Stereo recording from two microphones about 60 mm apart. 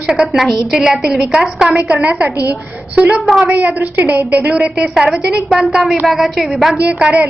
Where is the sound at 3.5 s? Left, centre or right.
Right.